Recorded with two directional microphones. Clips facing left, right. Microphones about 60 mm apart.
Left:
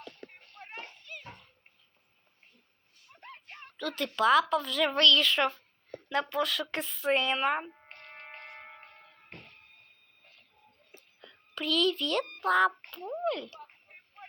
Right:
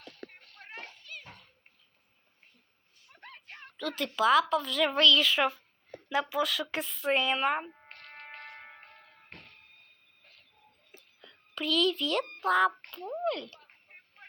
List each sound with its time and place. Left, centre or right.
0.9 s children playing: left
3.2 s a sound: right
3.7 s speech: centre
7.9 s music: right
11.2 s speech: centre